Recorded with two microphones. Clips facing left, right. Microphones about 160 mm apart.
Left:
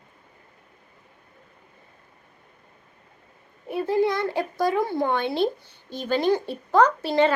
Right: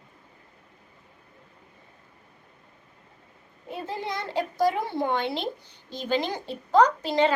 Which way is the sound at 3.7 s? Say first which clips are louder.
Left 10 dB; 20° right (ahead or behind).